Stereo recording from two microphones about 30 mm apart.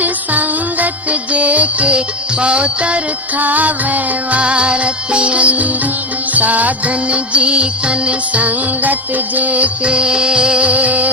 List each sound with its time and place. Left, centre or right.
0.0 s music: right
1.3 s music: right
2.4 s music: right
3.3 s music: right
6.3 s music: right
7.1 s music: right
8.3 s music: right
9.8 s music: right
10.6 s music: right